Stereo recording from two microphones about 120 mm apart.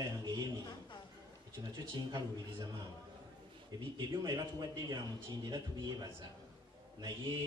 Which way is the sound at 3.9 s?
35° right (ahead or behind).